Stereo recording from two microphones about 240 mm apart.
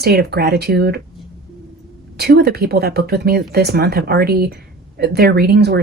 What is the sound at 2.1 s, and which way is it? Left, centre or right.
A woman's voice, right.